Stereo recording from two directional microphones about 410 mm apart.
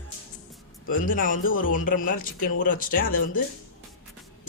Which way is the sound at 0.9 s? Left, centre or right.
Centre.